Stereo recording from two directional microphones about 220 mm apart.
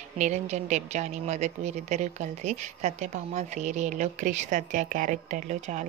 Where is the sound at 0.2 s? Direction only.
30° right (ahead or behind).